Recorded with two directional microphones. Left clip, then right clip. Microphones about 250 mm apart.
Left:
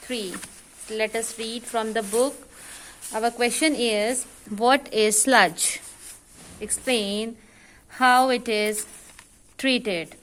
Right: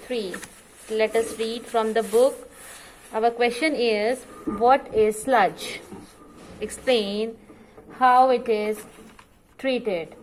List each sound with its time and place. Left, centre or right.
0.1 s speech: left
4.6 s a woman's voice: left
6.6 s a woman's voice: left
7.9 s a woman's voice: left